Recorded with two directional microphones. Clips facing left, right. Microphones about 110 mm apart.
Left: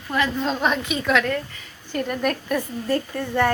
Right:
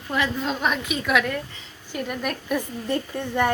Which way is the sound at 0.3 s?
5° right (ahead or behind).